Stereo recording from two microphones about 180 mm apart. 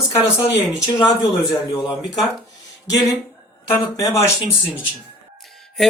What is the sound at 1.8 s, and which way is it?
Speech, centre (ahead or behind).